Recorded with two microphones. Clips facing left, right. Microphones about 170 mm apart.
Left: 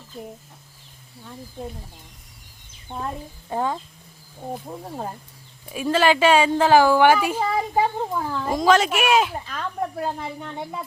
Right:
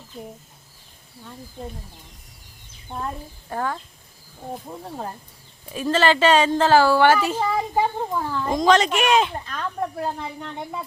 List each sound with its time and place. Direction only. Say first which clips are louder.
0.1 s speech: left 1 dB; centre (ahead or behind)
3.5 s speech: left 2 dB; 20° left (ahead or behind)
5.6 s a woman's voice: even; 10° left (ahead or behind)